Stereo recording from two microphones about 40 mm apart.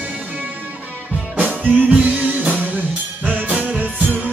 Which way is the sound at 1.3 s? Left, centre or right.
Right.